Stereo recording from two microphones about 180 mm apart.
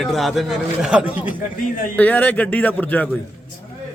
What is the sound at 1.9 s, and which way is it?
A man's voice, 10° left (ahead or behind).